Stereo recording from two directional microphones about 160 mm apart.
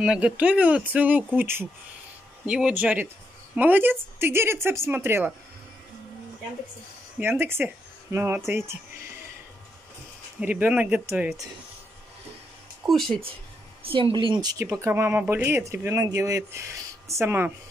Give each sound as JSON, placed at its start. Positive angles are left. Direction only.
{"t": 0.0, "sound": "speech", "side_deg": -5}
{"t": 7.2, "sound": "speech", "side_deg": -15}
{"t": 10.4, "sound": "speech", "side_deg": -10}
{"t": 12.8, "sound": "speech", "side_deg": 0}
{"t": 13.8, "sound": "speech", "side_deg": -35}